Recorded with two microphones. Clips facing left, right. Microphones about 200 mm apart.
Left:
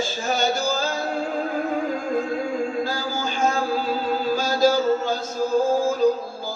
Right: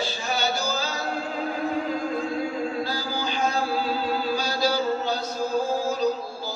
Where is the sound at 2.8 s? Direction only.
45° left (ahead or behind).